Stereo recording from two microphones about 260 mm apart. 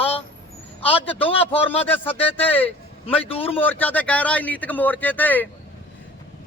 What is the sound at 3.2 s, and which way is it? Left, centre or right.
Speech, left.